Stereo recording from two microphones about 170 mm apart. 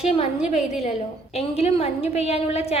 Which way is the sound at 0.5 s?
5° right (ahead or behind).